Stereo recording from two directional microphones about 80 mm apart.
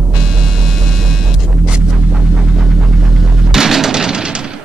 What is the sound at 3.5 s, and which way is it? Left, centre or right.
Music, centre.